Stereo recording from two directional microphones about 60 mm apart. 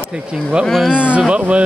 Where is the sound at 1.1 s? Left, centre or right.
Right.